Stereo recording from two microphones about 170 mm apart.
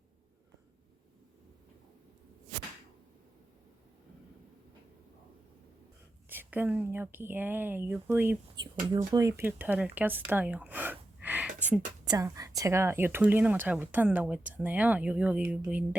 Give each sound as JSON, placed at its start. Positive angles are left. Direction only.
{"t": 6.2, "sound": "speech", "side_deg": -10}
{"t": 8.8, "sound": "speech", "side_deg": -25}
{"t": 12.0, "sound": "speech", "side_deg": -20}